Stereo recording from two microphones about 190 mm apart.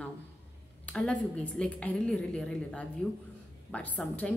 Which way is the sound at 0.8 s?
5° left (ahead or behind).